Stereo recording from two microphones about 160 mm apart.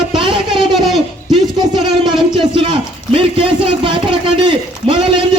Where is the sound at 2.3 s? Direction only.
30° right (ahead or behind).